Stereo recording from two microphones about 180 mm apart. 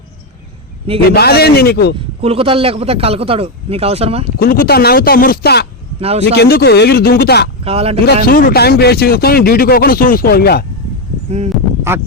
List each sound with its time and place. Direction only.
1.1 s speech: 60° left (ahead or behind)
2.2 s speech: 35° right (ahead or behind)
4.4 s speech: 55° left (ahead or behind)
6.0 s speech: 35° right (ahead or behind)
6.3 s speech: 60° left (ahead or behind)
7.6 s speech: 35° right (ahead or behind)
8.0 s speech: 55° left (ahead or behind)
11.9 s speech: 15° right (ahead or behind)